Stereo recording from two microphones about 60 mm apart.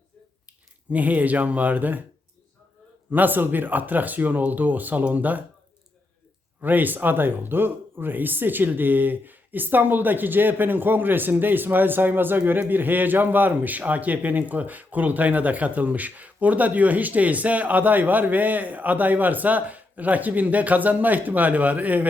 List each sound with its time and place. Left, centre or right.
0.9 s speech: right
3.1 s speech: right
6.6 s speech: right